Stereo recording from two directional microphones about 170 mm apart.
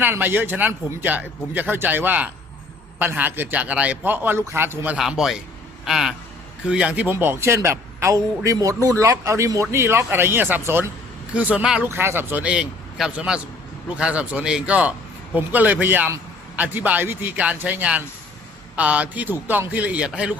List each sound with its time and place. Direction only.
0.0 s a man's voice: 10° right (ahead or behind)
4.9 s a man's voice: 5° right (ahead or behind)